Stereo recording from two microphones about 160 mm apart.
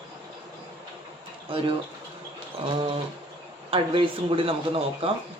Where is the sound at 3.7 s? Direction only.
35° right (ahead or behind).